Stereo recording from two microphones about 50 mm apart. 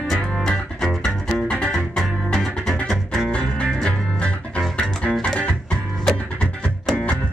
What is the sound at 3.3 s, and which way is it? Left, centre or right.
Music, left.